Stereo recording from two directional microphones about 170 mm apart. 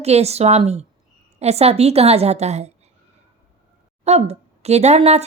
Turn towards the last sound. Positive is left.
turn(degrees=-40)  # may be behind; listen again after turning